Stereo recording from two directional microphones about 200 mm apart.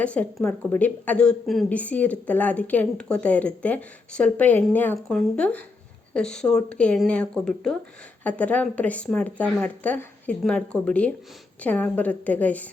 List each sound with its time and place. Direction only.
0.0 s a woman's voice: 5° left (ahead or behind)